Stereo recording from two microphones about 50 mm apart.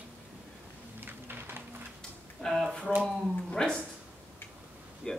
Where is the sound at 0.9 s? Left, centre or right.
Right.